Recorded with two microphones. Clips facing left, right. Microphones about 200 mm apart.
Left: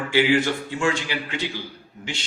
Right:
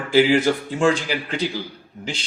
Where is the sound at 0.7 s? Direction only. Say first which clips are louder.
Right 5 dB; 40° right (ahead or behind).